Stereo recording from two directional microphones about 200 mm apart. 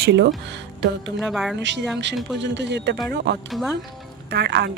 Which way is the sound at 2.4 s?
60° right (ahead or behind).